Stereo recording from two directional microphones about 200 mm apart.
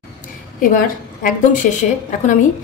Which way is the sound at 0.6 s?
40° left (ahead or behind).